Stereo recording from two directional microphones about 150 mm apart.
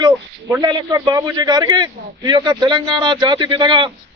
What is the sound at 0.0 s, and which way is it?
Speech, 25° right (ahead or behind).